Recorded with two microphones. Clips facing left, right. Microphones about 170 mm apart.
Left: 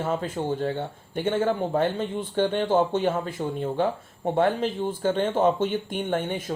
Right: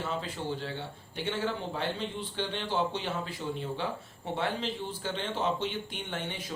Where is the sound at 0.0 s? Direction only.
50° left (ahead or behind).